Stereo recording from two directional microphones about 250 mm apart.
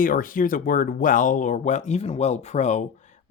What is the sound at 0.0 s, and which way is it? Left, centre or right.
Speech, left.